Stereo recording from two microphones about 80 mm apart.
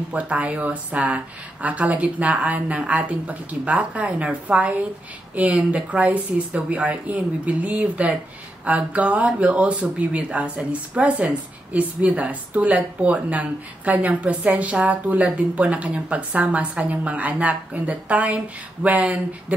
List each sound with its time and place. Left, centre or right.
0.1 s speech: centre